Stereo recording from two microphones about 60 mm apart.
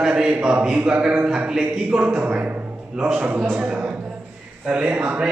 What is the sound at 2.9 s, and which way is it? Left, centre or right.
Speech, centre.